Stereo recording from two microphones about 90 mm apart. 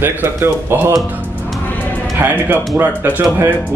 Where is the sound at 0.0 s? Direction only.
25° right (ahead or behind).